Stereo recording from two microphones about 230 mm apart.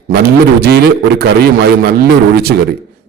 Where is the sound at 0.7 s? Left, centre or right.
Right.